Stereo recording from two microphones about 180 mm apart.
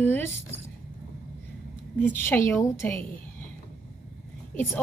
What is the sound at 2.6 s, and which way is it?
Speech, 15° left (ahead or behind).